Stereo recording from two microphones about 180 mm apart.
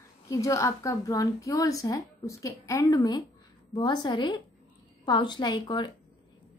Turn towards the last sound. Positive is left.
turn(degrees=25)  # may be behind; listen again after turning